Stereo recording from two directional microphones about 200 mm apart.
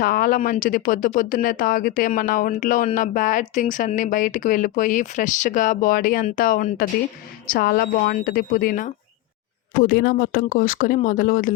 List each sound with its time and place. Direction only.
0.0 s speech: 45° left (ahead or behind)